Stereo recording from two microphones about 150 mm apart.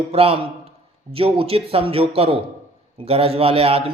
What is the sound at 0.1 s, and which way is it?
A man's voice, 40° right (ahead or behind).